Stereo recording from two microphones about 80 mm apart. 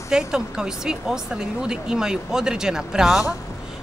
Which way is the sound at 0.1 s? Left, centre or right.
Centre.